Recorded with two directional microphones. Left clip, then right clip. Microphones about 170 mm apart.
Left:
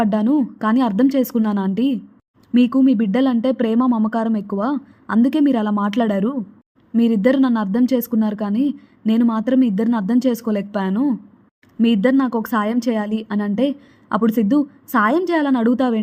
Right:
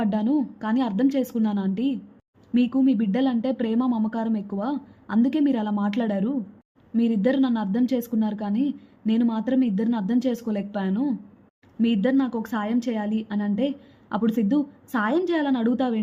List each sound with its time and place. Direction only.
0.0 s speech: 30° left (ahead or behind)